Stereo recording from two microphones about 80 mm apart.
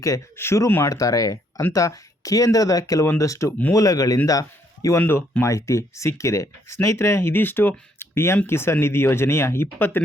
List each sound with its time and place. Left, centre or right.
0.3 s speech: left
0.9 s a man's voice: left
4.9 s speech: left